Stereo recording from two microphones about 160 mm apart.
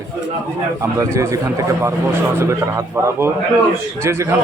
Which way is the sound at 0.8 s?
20° right (ahead or behind).